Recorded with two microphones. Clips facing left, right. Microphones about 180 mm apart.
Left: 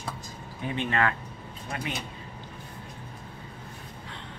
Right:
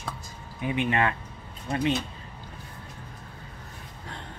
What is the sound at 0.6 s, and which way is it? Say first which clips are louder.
Speech: right 2 dB; 15° right (ahead or behind).